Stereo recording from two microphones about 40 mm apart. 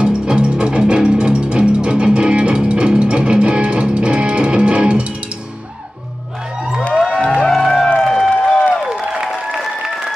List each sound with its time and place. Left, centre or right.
0.0 s music: right
7.1 s music: left
7.4 s music: centre